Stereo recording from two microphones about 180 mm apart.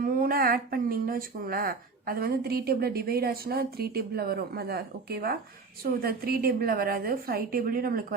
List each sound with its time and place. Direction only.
0.0 s speech: 55° right (ahead or behind)